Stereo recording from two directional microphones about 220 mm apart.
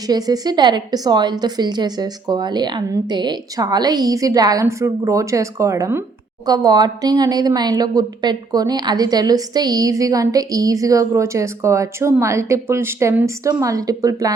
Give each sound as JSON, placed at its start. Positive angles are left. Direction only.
{"t": 0.1, "sound": "a woman's voice", "side_deg": -20}